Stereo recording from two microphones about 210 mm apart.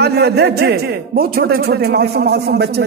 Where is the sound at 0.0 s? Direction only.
50° right (ahead or behind).